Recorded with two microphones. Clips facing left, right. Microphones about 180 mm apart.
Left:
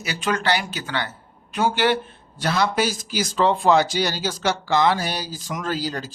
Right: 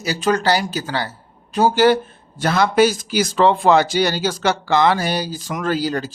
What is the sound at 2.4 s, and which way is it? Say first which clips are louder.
Speech: right 6 dB; 50° right (ahead or behind).